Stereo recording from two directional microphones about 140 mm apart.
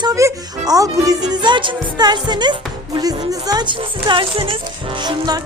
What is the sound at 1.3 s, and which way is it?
Music, 35° right (ahead or behind).